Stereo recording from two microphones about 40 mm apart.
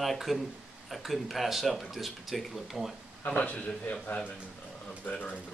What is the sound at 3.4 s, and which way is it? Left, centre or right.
Speech, left.